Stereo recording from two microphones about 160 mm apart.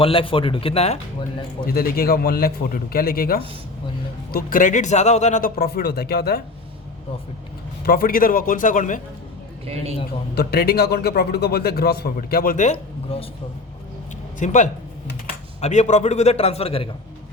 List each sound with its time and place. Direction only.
0.0 s speech: 35° left (ahead or behind)
1.6 s a man's voice: 70° left (ahead or behind); by 5.5 s 45° left (ahead or behind)
5.5 s speech: 80° left
7.9 s a man's voice: 65° left (ahead or behind)
9.6 s speech: 40° right (ahead or behind)
10.3 s a man's voice: 75° left (ahead or behind); by 13.2 s 40° left (ahead or behind)
14.3 s a man's voice: 50° left (ahead or behind)